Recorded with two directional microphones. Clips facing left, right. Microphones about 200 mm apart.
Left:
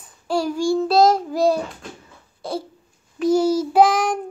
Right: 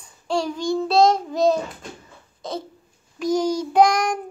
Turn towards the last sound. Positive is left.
turn(degrees=5)  # may be behind; listen again after turning